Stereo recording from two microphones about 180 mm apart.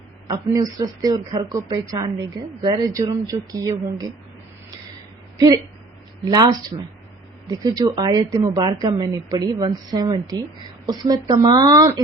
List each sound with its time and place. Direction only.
0.3 s speech: 20° right (ahead or behind)
6.2 s speech: 20° right (ahead or behind)